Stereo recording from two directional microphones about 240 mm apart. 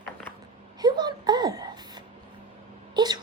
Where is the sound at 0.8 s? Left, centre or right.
Centre.